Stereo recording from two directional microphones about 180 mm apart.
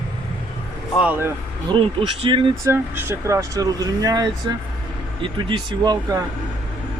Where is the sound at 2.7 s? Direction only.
15° right (ahead or behind).